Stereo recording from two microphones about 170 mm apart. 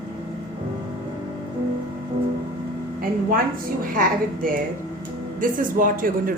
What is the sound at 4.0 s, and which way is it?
Speech, 55° right (ahead or behind).